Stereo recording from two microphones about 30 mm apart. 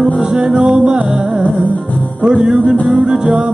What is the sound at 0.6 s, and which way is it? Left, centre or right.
Music, right.